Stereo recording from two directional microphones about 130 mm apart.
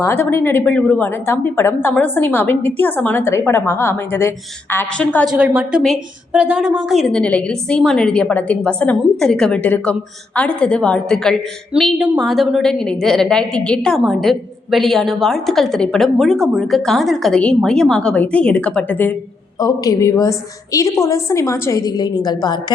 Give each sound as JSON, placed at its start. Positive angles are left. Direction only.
{"t": 0.0, "sound": "a woman's voice", "side_deg": 15}
{"t": 5.2, "sound": "a woman's voice", "side_deg": -5}
{"t": 19.5, "sound": "a woman's voice", "side_deg": 25}